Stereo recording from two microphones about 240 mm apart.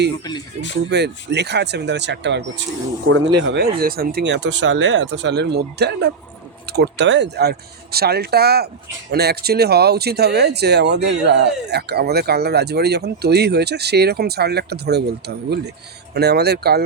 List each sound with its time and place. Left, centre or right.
0.9 s speech: right